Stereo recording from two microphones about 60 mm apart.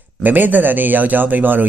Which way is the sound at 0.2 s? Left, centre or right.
Right.